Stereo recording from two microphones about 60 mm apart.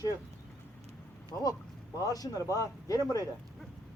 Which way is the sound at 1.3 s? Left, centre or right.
Left.